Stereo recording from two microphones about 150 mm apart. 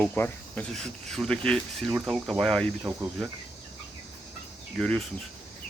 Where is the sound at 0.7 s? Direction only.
Centre (ahead or behind).